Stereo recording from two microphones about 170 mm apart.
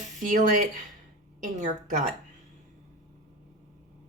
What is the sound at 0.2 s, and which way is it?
Speech, 50° right (ahead or behind).